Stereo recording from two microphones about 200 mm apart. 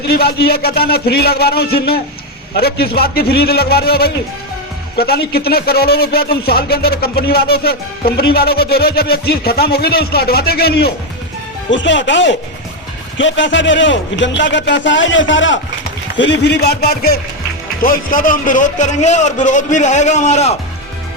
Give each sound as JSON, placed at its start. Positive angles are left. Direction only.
{"t": 0.1, "sound": "a man's voice", "side_deg": 55}
{"t": 11.7, "sound": "a man's voice", "side_deg": 65}